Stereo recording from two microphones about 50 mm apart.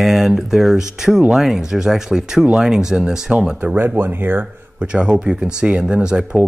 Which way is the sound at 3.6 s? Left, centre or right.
Right.